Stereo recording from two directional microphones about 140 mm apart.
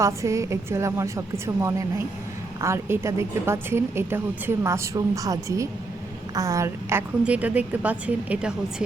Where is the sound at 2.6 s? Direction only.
20° right (ahead or behind).